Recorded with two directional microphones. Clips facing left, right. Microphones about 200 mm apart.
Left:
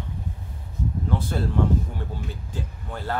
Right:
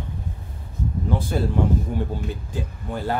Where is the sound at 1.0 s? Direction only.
10° right (ahead or behind).